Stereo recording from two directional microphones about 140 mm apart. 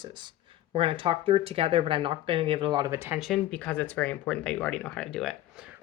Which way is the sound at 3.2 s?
5° left (ahead or behind).